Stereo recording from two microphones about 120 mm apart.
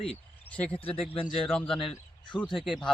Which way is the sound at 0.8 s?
50° left (ahead or behind).